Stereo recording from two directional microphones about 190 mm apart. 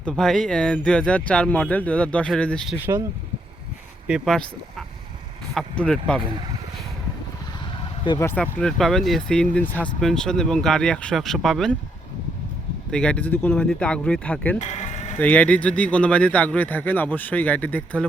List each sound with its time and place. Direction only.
0.0 s speech: centre (ahead or behind)
2.8 s speech: 15° right (ahead or behind)
4.0 s speech: centre (ahead or behind)
5.5 s speech: 5° left (ahead or behind)
8.0 s speech: 20° left (ahead or behind)
8.3 s speech: 5° left (ahead or behind)
12.9 s speech: 5° left (ahead or behind)
14.6 s sheep: 35° left (ahead or behind)
15.2 s speech: 5° left (ahead or behind)